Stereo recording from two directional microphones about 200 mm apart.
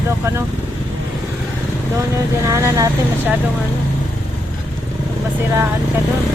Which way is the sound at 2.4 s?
15° right (ahead or behind).